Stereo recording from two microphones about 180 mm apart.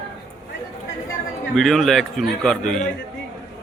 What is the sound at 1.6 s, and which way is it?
A man's voice, centre (ahead or behind).